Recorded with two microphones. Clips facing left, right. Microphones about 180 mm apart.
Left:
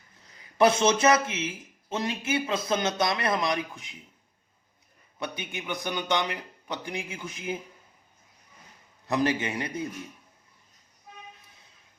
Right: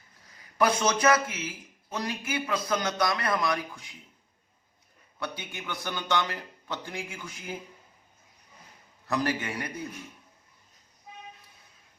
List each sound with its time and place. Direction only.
0.6 s a man's voice: 25° left (ahead or behind)
5.2 s speech: 20° left (ahead or behind)
9.0 s a man's voice: 20° left (ahead or behind)